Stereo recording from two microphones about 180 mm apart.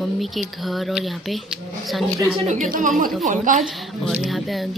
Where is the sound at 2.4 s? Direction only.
45° right (ahead or behind).